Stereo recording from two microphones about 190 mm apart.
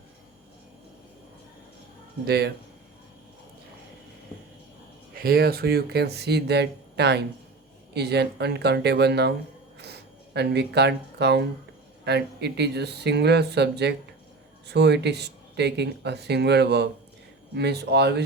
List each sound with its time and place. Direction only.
2.2 s speech: 55° right (ahead or behind)
5.1 s speech: 55° right (ahead or behind)
9.7 s a sound: 60° right (ahead or behind)
12.0 s speech: 60° right (ahead or behind)